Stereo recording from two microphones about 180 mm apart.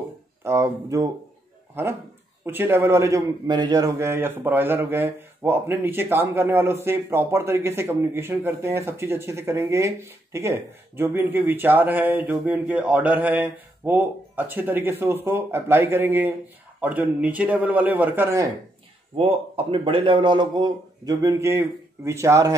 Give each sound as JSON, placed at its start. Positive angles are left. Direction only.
{"t": 0.4, "sound": "a man's voice", "side_deg": -15}
{"t": 19.1, "sound": "speech", "side_deg": -30}